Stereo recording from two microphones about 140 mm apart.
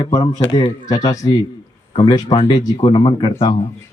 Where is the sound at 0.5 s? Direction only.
30° left (ahead or behind).